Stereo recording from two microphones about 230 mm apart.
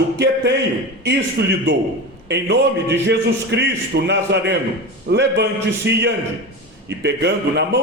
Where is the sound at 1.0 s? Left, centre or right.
Right.